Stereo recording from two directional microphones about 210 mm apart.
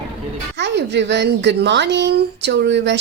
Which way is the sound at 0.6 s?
55° right (ahead or behind).